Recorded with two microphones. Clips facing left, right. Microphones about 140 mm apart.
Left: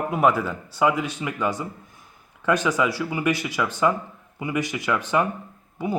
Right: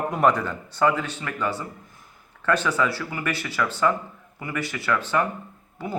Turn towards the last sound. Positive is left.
turn(degrees=15)  # may be behind; listen again after turning